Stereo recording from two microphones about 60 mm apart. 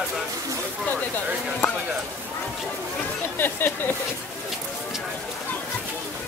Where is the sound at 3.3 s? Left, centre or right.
Left.